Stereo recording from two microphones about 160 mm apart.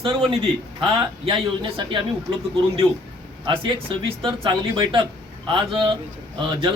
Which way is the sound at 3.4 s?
30° right (ahead or behind).